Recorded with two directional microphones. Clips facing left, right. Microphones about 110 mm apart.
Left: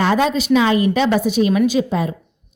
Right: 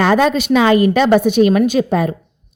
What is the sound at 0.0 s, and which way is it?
A woman's voice, 60° right (ahead or behind).